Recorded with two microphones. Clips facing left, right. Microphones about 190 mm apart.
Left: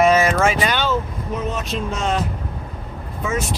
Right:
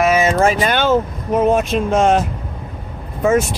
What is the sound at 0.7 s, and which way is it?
Speech, 50° right (ahead or behind).